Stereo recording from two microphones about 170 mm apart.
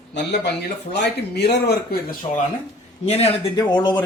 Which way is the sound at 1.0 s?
80° left.